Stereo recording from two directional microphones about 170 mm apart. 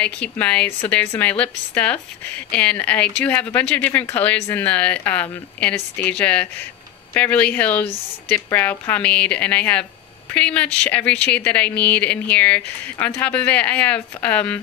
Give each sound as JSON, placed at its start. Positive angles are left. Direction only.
{"t": 0.0, "sound": "speech", "side_deg": 10}